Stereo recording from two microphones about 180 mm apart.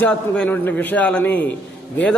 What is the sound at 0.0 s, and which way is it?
A man's voice, 5° left (ahead or behind).